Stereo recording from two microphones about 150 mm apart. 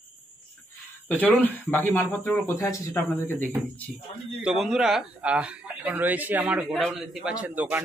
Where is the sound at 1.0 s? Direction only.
10° left (ahead or behind).